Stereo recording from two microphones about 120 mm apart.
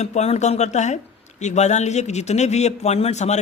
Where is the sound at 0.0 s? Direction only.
70° left (ahead or behind).